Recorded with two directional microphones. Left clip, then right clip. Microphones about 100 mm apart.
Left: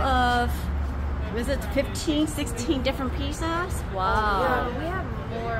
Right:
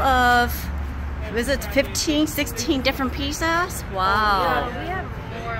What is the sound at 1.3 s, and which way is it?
Speech, 90° right.